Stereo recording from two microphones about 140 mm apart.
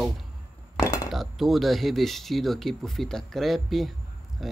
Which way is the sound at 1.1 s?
Centre (ahead or behind).